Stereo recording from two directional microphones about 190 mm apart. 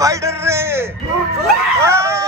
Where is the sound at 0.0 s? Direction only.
15° right (ahead or behind).